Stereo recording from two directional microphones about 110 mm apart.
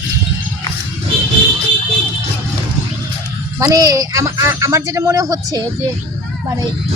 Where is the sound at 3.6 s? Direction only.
35° right (ahead or behind).